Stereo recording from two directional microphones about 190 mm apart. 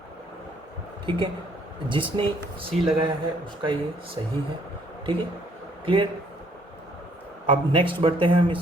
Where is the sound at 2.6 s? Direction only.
Centre (ahead or behind).